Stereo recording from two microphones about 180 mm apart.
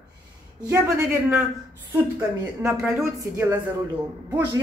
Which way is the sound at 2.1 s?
10° right (ahead or behind).